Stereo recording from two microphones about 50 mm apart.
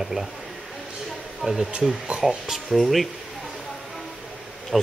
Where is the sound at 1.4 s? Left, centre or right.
Centre.